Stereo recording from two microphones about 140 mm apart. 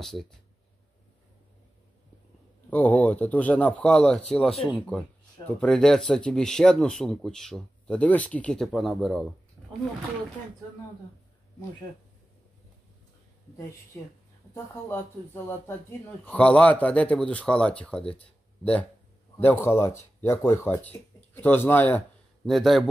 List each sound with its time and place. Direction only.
0.0 s speech: centre (ahead or behind)
2.7 s speech: 10° left (ahead or behind)
5.6 s speech: 5° left (ahead or behind)
13.9 s speech: 15° left (ahead or behind)
18.2 s a sound: 10° left (ahead or behind)
19.4 s speech: 15° left (ahead or behind)
22.4 s speech: centre (ahead or behind)